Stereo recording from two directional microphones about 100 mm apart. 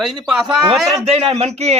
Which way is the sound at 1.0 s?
90° right.